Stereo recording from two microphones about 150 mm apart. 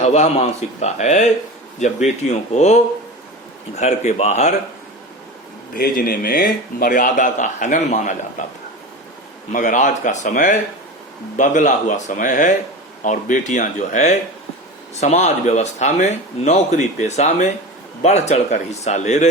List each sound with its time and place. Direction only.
0.0 s speech: 45° left (ahead or behind)
5.7 s speech: 70° left (ahead or behind); by 19.3 s 50° left (ahead or behind)